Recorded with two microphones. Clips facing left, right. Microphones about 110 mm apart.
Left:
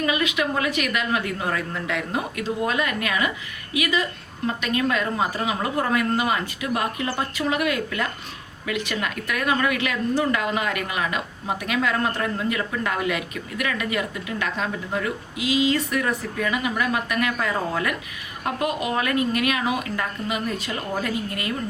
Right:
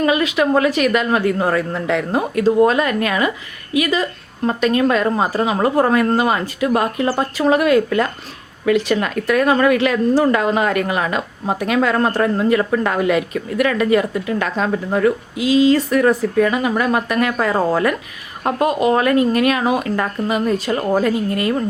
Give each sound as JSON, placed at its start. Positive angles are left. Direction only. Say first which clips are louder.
{"t": 0.0, "sound": "a woman's voice", "louder": "right 7 dB", "side_deg": -40}
{"t": 15.4, "sound": "a woman's voice", "louder": "right 7 dB", "side_deg": -35}